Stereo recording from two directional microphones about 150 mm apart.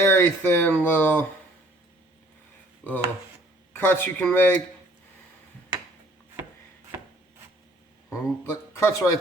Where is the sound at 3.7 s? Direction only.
15° left (ahead or behind).